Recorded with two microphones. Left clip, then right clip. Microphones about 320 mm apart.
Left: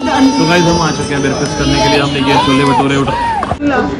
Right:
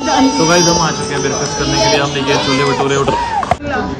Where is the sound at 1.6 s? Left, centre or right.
Left.